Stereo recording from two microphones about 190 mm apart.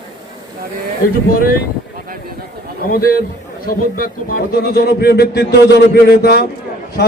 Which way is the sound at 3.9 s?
50° left (ahead or behind).